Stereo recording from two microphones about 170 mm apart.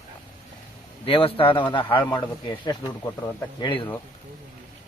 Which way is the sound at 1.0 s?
35° left (ahead or behind).